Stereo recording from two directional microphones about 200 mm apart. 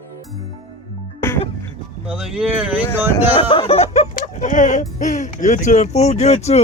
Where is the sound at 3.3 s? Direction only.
25° left (ahead or behind).